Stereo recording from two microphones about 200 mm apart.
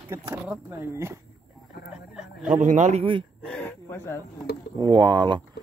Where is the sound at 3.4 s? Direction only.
5° left (ahead or behind).